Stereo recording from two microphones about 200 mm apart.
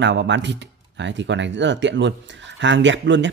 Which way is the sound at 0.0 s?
60° right (ahead or behind).